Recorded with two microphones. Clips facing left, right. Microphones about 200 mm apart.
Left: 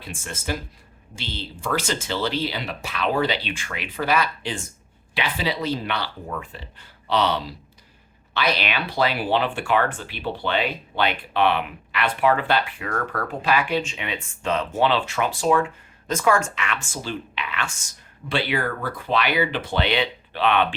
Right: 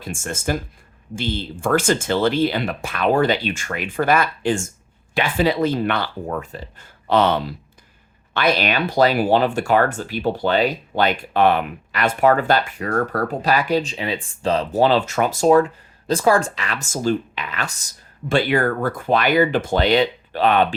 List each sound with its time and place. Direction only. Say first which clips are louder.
0.0 s speech: right 7 dB; 45° right (ahead or behind)